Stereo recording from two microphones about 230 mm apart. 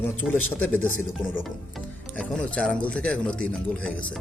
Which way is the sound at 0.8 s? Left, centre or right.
Left.